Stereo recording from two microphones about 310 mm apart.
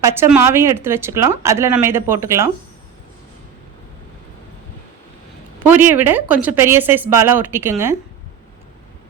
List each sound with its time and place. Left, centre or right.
0.0 s speech: centre
5.5 s speech: centre